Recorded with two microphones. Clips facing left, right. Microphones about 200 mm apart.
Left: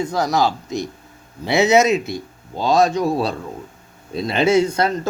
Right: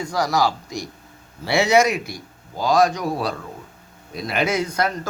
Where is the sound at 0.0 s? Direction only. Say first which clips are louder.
Left 2 dB; 20° left (ahead or behind).